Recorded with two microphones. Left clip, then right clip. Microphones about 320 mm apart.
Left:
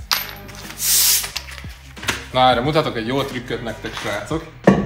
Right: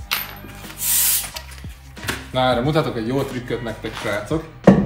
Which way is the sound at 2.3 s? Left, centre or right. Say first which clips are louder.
Left 3 dB; centre.